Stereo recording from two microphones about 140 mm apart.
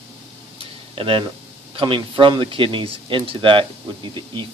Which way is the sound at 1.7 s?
35° right (ahead or behind).